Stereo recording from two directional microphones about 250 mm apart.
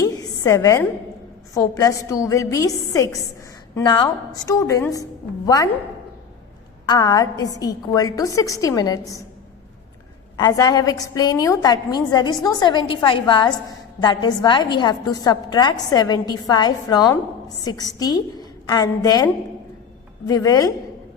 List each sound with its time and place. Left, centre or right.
0.0 s a sound: centre
1.5 s a woman's voice: centre
6.8 s a woman's voice: centre
10.3 s a woman's voice: centre